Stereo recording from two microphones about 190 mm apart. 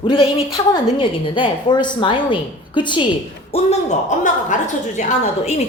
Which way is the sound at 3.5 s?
35° left (ahead or behind).